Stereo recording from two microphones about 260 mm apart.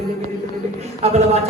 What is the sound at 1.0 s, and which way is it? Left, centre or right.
Speech, right.